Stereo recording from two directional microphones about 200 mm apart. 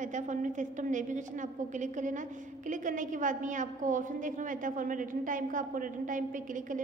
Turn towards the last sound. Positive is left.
turn(degrees=-40)  # may be behind; listen again after turning